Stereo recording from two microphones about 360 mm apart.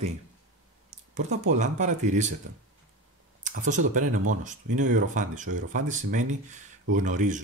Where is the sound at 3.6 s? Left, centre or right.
Right.